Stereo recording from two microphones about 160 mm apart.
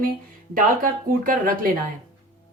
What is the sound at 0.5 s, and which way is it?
Speech, 60° right (ahead or behind).